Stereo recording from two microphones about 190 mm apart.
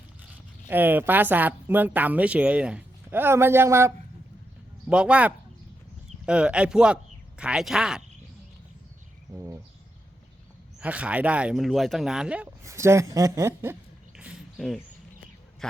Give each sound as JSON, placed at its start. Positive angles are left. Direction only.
{"t": 0.7, "sound": "speech", "side_deg": -10}
{"t": 9.3, "sound": "bird", "side_deg": -15}
{"t": 10.8, "sound": "speech", "side_deg": -5}
{"t": 14.2, "sound": "a sound", "side_deg": -5}
{"t": 15.6, "sound": "speech", "side_deg": 5}